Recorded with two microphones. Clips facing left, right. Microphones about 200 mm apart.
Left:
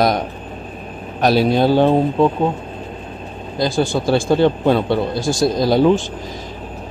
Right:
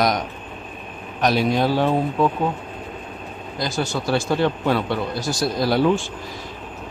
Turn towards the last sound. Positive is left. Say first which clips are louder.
# left 5 dB
turn(degrees=20)  # may be behind; listen again after turning